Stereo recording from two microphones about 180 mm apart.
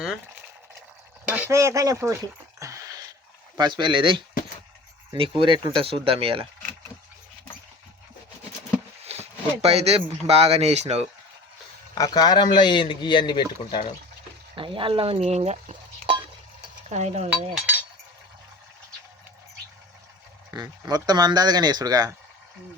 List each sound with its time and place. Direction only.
1.2 s a sound: 5° right (ahead or behind)
3.6 s speech: 25° right (ahead or behind)
9.0 s speech: 35° right (ahead or behind)
11.9 s a man's voice: 20° left (ahead or behind)
14.5 s speech: 30° right (ahead or behind)
16.9 s speech: 40° right (ahead or behind)
20.5 s speech: 20° right (ahead or behind)